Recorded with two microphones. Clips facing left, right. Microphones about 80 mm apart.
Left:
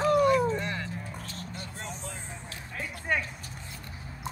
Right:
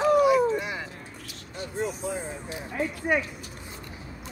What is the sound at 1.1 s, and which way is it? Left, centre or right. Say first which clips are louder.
Vehicle: left 3 dB; left.